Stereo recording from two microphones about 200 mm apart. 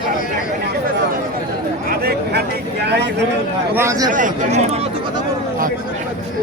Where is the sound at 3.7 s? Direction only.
15° right (ahead or behind).